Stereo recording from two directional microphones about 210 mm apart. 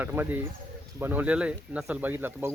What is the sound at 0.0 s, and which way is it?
Speech, 10° right (ahead or behind).